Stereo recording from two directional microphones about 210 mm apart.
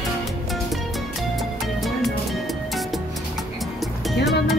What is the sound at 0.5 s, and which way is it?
Music, centre (ahead or behind).